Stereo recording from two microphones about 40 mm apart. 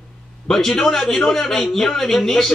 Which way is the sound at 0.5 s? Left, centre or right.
Centre.